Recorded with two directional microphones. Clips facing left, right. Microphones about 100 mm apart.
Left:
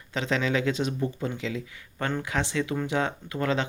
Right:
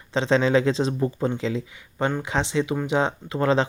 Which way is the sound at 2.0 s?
20° right (ahead or behind).